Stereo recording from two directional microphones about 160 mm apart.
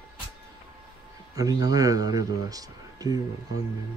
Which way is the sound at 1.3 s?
25° right (ahead or behind).